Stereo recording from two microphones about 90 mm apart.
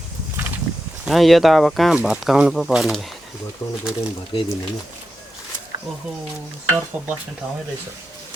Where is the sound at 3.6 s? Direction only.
30° left (ahead or behind).